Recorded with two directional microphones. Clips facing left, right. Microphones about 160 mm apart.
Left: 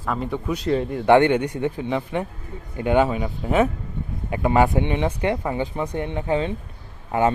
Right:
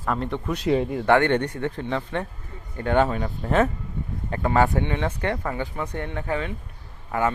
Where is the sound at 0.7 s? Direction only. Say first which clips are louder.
Right 1 dB; 10° right (ahead or behind).